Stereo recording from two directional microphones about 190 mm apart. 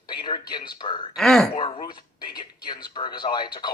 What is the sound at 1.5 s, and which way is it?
Speech, 25° left (ahead or behind).